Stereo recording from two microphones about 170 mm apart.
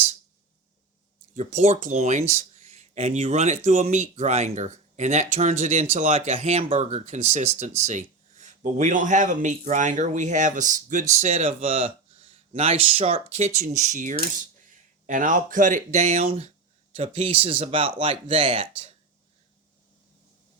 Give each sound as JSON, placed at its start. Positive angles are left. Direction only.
{"t": 1.3, "sound": "speech", "side_deg": -45}